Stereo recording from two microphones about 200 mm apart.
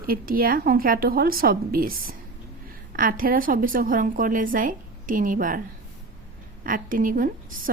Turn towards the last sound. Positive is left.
turn(degrees=-45)  # may be behind; listen again after turning